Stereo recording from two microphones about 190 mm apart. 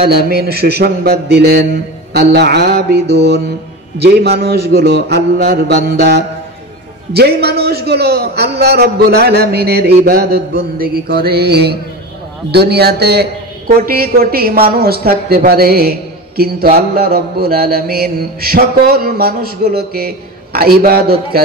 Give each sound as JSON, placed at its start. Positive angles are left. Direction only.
{"t": 0.0, "sound": "a man's voice", "side_deg": -55}
{"t": 13.8, "sound": "mantra", "side_deg": -50}